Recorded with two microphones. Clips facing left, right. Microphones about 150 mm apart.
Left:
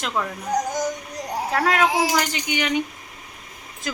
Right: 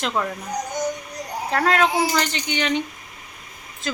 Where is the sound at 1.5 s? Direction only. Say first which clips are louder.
Right 1 dB; 5° left (ahead or behind).